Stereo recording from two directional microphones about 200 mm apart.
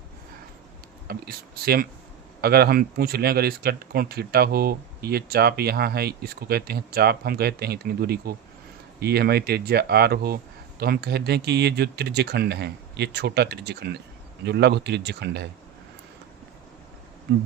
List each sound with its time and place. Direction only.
1.0 s speech: 50° right (ahead or behind)